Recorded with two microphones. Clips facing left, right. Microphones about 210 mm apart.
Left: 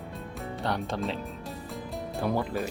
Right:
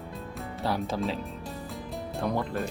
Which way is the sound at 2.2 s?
Centre (ahead or behind).